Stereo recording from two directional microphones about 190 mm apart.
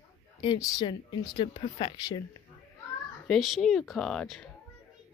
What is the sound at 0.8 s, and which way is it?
Speech, 25° left (ahead or behind).